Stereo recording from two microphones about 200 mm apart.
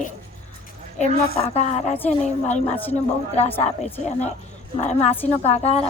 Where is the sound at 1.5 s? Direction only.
35° left (ahead or behind).